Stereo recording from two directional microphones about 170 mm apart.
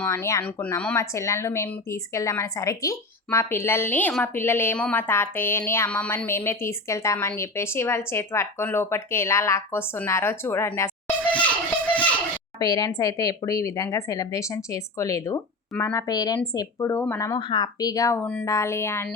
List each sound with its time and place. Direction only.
0.0 s a woman's voice: 15° left (ahead or behind)
12.5 s a woman's voice: 20° left (ahead or behind)